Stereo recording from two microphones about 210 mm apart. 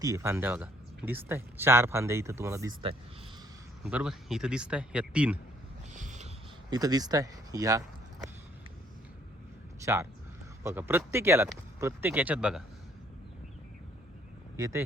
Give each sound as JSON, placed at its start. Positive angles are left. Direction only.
{"t": 0.0, "sound": "speech", "side_deg": -15}
{"t": 3.8, "sound": "speech", "side_deg": -5}
{"t": 5.9, "sound": "a sound", "side_deg": -35}
{"t": 6.7, "sound": "speech", "side_deg": -20}
{"t": 9.8, "sound": "speech", "side_deg": -15}
{"t": 14.5, "sound": "speech", "side_deg": -15}